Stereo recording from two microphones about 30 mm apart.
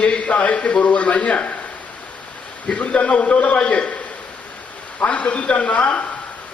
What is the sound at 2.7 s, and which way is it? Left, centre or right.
A man's voice, left.